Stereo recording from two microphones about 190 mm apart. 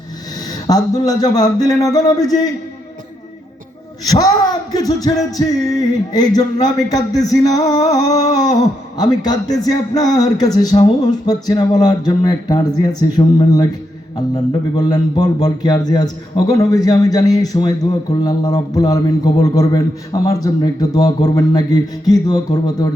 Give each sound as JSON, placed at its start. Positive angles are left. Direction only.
{"t": 0.7, "sound": "speech", "side_deg": 20}
{"t": 4.7, "sound": "speech", "side_deg": 20}